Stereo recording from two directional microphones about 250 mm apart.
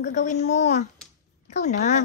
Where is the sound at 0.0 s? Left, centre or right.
Left.